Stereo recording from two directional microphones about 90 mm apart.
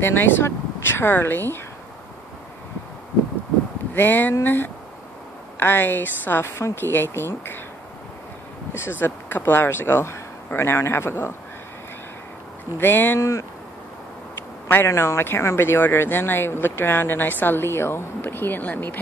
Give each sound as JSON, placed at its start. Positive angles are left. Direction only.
{"t": 0.0, "sound": "speech", "side_deg": 25}
{"t": 3.9, "sound": "speech", "side_deg": 20}
{"t": 9.0, "sound": "speech", "side_deg": 25}
{"t": 12.7, "sound": "speech", "side_deg": 25}